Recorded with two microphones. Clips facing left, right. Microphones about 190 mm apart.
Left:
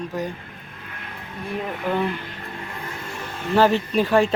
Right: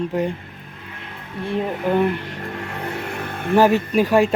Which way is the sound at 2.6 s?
70° right (ahead or behind).